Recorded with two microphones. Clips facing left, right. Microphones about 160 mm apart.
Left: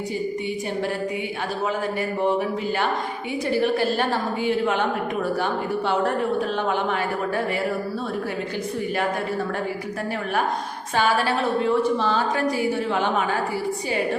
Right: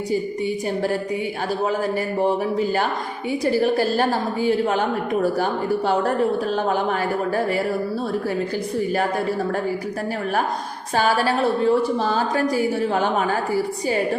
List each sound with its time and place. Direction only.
3.4 s a woman's voice: 40° right (ahead or behind)
10.9 s a woman's voice: 40° right (ahead or behind)